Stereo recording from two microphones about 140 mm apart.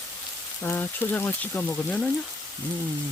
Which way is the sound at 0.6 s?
15° left (ahead or behind).